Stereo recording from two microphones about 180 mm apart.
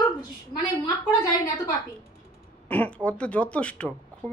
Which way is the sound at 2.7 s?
5° left (ahead or behind).